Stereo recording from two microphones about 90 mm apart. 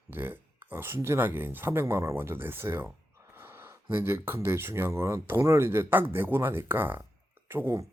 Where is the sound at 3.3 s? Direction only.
25° right (ahead or behind).